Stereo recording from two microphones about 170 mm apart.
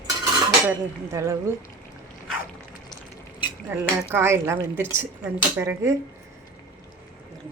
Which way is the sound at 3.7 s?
10° right (ahead or behind).